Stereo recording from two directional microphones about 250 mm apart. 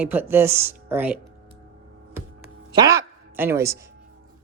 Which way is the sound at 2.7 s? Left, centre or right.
Centre.